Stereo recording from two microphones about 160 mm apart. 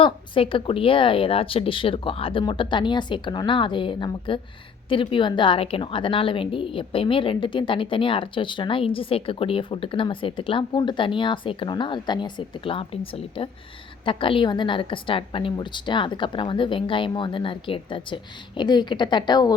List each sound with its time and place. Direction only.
0.0 s a woman's voice: 35° left (ahead or behind)